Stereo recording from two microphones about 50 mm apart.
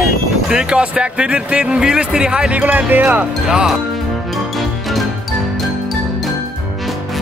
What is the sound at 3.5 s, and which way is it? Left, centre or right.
Speech, centre.